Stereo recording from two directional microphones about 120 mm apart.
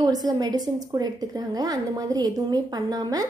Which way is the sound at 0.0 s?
30° right (ahead or behind).